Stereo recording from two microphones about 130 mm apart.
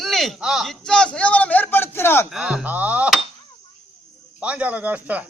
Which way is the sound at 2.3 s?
5° right (ahead or behind).